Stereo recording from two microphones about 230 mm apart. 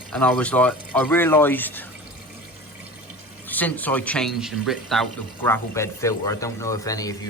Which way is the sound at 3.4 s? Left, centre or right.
Centre.